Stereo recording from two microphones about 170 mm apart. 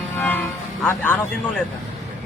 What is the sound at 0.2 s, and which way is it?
Music, 10° left (ahead or behind).